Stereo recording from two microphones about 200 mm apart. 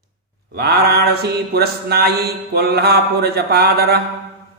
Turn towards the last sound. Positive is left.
turn(degrees=-55)  # may be behind; listen again after turning